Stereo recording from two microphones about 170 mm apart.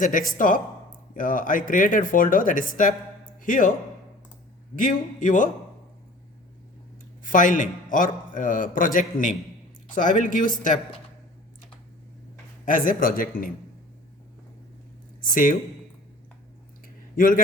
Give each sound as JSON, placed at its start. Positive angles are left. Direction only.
{"t": 0.0, "sound": "a man's voice", "side_deg": 50}
{"t": 4.7, "sound": "a man's voice", "side_deg": 50}
{"t": 7.3, "sound": "a man's voice", "side_deg": 50}
{"t": 12.6, "sound": "a man's voice", "side_deg": 50}
{"t": 15.2, "sound": "speech", "side_deg": 55}
{"t": 17.2, "sound": "a man's voice", "side_deg": 55}